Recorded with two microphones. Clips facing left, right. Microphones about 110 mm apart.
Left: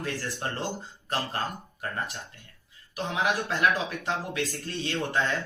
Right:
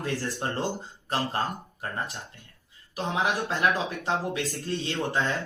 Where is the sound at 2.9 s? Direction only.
35° right (ahead or behind).